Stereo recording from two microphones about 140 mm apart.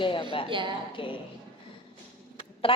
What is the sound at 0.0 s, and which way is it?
Speech, 40° left (ahead or behind).